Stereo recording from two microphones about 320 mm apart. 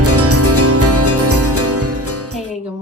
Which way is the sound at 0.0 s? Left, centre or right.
Right.